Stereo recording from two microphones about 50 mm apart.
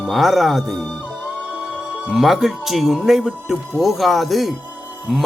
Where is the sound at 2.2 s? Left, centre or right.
Centre.